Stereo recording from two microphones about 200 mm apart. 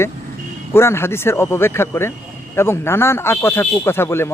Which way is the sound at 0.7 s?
15° left (ahead or behind).